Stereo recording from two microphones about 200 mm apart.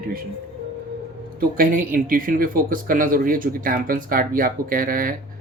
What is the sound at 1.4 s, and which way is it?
Speech, 45° right (ahead or behind).